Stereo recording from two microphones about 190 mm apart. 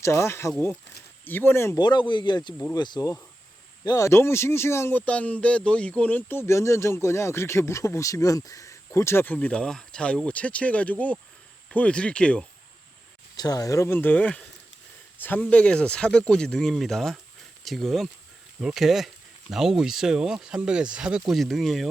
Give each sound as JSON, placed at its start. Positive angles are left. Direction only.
{"t": 0.0, "sound": "speech", "side_deg": 15}
{"t": 13.3, "sound": "speech", "side_deg": 20}